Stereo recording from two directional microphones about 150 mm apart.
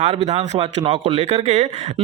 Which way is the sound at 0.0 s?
45° right (ahead or behind).